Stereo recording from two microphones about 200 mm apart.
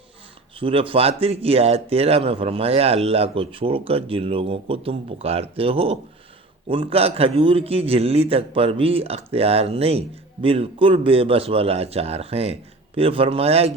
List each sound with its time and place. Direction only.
0.6 s speech: 25° right (ahead or behind)